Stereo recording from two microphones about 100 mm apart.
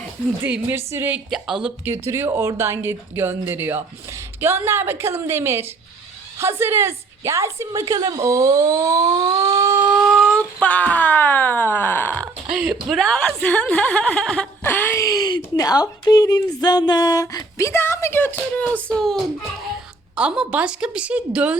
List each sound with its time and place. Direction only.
0.4 s a woman's voice: 15° right (ahead or behind)
1.3 s speech: 5° right (ahead or behind)
1.8 s speech: 25° right (ahead or behind)
10.2 s speech: 5° left (ahead or behind)
12.5 s a woman's voice: 10° right (ahead or behind)
13.0 s a woman's voice: 5° left (ahead or behind)
14.6 s a sound: 20° left (ahead or behind)
14.9 s a woman's voice: 35° left (ahead or behind); by 19.2 s 5° left (ahead or behind)
20.1 s a woman's voice: 10° right (ahead or behind)